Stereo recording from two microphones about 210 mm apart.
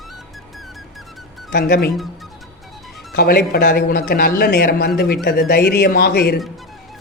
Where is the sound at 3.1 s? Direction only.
50° left (ahead or behind).